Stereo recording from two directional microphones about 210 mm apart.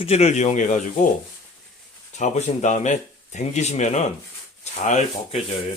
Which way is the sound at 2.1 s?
35° left (ahead or behind).